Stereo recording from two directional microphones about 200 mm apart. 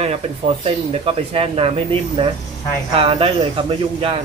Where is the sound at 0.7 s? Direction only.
30° right (ahead or behind).